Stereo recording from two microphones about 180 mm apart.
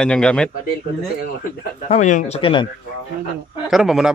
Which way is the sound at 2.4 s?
25° left (ahead or behind).